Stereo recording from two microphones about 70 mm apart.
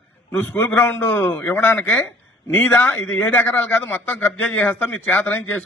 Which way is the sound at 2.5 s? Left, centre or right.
Left.